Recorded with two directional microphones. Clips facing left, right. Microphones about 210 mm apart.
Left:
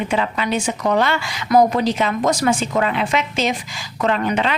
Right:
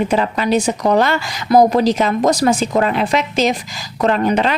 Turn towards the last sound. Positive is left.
turn(degrees=-40)  # may be behind; listen again after turning